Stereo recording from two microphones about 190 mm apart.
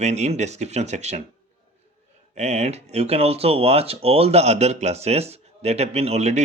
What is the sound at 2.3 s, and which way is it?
Speech, 35° right (ahead or behind).